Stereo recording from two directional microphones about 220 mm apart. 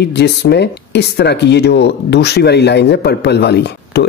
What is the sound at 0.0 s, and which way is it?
Speech, 50° left (ahead or behind).